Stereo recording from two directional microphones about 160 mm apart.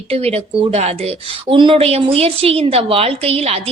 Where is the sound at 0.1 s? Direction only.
40° right (ahead or behind).